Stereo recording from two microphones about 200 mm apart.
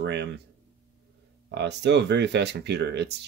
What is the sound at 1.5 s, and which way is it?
Speech, 60° right (ahead or behind).